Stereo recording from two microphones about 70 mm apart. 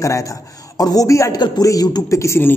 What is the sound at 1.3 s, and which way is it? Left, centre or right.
A woman's voice, left.